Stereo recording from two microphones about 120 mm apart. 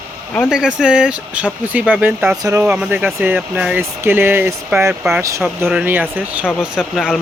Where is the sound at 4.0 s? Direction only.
20° right (ahead or behind).